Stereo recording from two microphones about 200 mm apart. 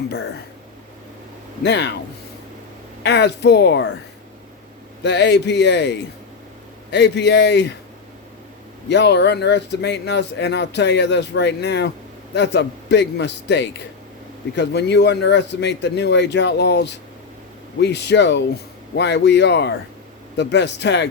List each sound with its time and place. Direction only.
1.6 s speech: 60° left (ahead or behind)
3.0 s speech: 60° left (ahead or behind)
5.0 s speech: 60° left (ahead or behind)
8.9 s speech: 60° left (ahead or behind)